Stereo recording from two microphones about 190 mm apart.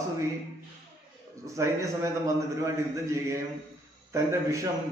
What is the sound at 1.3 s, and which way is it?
A man's voice, 15° right (ahead or behind).